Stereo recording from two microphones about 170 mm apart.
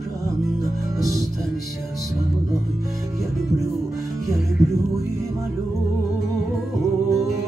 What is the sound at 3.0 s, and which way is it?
Music, 20° right (ahead or behind).